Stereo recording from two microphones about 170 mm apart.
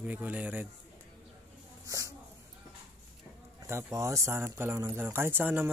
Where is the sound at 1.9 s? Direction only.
20° right (ahead or behind).